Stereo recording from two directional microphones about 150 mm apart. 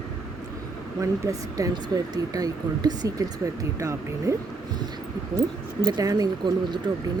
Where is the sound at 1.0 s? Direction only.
25° right (ahead or behind).